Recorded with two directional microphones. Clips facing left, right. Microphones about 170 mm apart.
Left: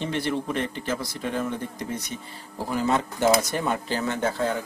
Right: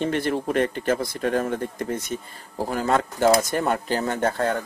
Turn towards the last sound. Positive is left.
turn(degrees=-55)  # may be behind; listen again after turning